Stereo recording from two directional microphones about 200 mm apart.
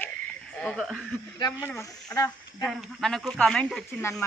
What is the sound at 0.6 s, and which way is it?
Speech, centre (ahead or behind).